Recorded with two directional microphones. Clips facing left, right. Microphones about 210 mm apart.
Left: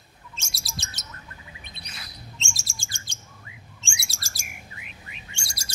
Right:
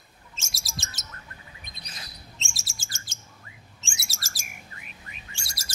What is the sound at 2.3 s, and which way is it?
Bird, centre (ahead or behind).